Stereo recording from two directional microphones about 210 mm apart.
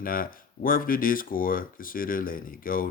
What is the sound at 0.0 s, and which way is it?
Speech, 40° left (ahead or behind).